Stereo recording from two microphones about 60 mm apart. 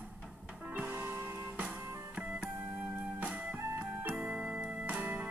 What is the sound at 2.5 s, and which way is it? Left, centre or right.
Music, right.